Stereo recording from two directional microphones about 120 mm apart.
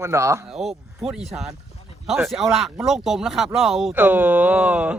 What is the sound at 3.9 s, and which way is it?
Speech, 15° right (ahead or behind).